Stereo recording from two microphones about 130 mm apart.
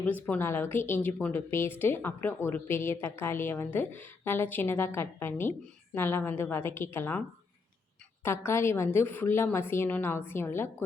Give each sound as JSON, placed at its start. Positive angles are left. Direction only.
{"t": 0.0, "sound": "speech", "side_deg": 15}